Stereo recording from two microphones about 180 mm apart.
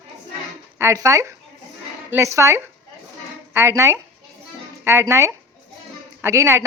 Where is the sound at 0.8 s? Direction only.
15° right (ahead or behind).